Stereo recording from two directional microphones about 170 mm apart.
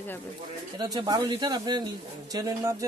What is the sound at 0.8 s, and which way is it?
A man's voice, 25° right (ahead or behind).